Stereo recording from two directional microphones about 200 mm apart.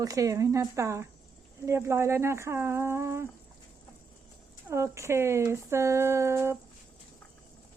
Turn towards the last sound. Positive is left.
turn(degrees=-15)  # may be behind; listen again after turning